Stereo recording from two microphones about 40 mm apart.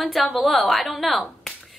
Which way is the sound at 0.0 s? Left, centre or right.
Centre.